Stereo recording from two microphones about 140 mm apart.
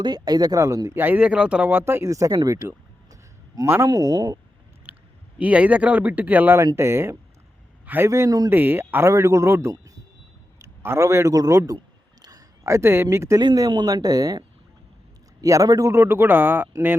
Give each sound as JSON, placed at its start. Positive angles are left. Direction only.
{"t": 0.0, "sound": "speech", "side_deg": -30}
{"t": 4.9, "sound": "a sound", "side_deg": -10}
{"t": 5.4, "sound": "a man's voice", "side_deg": -10}
{"t": 13.4, "sound": "speech", "side_deg": -30}